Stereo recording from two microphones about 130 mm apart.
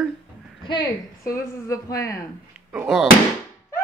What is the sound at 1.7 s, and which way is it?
Speech, 25° left (ahead or behind).